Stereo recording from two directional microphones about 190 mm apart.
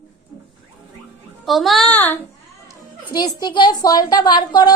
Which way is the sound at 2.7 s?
20° left (ahead or behind).